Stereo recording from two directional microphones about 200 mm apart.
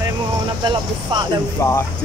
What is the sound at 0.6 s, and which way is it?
Speech, 20° right (ahead or behind).